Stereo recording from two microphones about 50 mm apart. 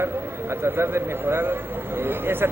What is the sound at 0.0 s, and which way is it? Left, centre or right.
Speech, right.